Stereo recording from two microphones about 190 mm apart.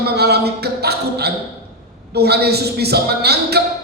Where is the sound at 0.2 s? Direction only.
60° right (ahead or behind).